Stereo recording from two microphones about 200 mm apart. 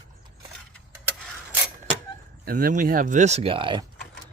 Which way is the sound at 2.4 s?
45° right (ahead or behind).